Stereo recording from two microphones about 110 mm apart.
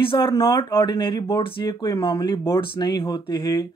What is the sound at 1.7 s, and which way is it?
Speech, 30° left (ahead or behind).